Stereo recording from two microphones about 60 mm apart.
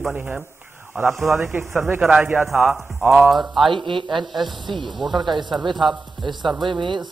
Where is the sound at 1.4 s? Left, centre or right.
Right.